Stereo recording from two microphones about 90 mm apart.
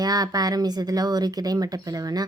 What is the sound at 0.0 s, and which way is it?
Speech, 45° right (ahead or behind).